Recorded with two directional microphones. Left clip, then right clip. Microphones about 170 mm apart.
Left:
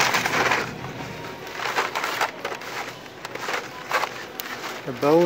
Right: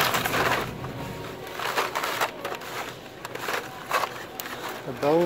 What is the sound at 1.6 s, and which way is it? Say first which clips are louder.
Crushing: left 2 dB; 30° right (ahead or behind).